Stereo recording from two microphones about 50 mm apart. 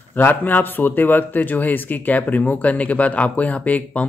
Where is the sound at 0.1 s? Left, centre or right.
Left.